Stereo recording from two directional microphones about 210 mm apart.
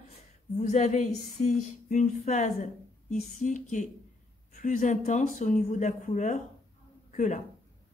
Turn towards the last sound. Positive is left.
turn(degrees=35)  # may be behind; listen again after turning